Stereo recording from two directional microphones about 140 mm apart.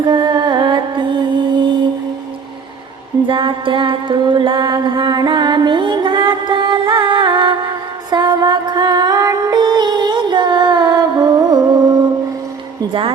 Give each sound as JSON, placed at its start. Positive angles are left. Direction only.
{"t": 0.0, "sound": "music", "side_deg": -30}
{"t": 3.2, "sound": "music", "side_deg": -35}
{"t": 12.9, "sound": "a woman's voice", "side_deg": -40}